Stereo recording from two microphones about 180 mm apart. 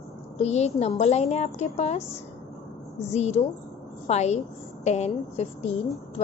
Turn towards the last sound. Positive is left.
turn(degrees=35)  # may be behind; listen again after turning